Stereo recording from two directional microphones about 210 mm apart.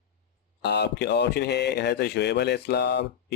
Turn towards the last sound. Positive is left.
turn(degrees=55)  # may be behind; listen again after turning